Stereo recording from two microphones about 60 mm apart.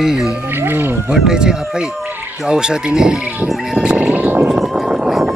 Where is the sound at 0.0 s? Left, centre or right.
Centre.